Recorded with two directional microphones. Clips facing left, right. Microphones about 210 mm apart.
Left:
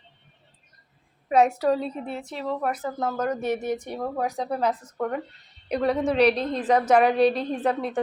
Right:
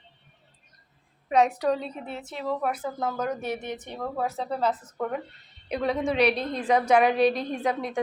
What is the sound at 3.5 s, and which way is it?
A woman's voice, 10° left (ahead or behind).